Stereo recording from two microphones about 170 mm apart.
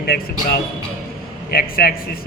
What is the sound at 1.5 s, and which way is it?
Speech, 60° left (ahead or behind).